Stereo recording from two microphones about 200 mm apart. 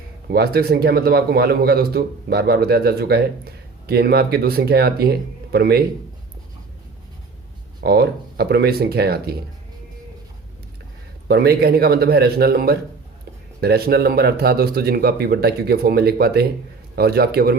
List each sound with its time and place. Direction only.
0.3 s a man's voice: 50° right (ahead or behind)
7.8 s a man's voice: 50° right (ahead or behind)
11.3 s a man's voice: 50° right (ahead or behind)